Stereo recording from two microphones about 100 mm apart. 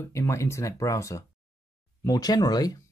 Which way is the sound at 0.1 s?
30° left (ahead or behind).